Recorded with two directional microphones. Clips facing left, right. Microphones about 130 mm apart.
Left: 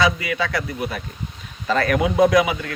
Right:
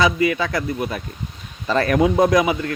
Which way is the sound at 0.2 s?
40° right (ahead or behind).